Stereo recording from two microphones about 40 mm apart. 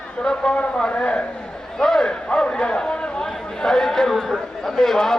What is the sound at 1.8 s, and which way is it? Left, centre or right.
A man's voice, centre.